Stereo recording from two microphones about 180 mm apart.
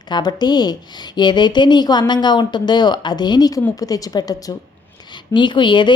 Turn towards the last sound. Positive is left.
turn(degrees=25)  # may be behind; listen again after turning